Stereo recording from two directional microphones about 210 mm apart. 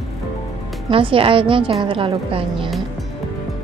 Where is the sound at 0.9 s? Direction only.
25° right (ahead or behind).